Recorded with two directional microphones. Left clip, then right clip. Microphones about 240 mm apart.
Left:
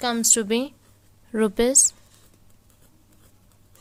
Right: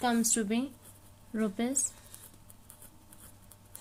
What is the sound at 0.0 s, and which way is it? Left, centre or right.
A woman's voice, left.